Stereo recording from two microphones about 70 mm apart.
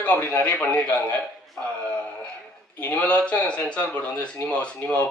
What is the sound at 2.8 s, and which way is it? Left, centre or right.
A man's voice, centre.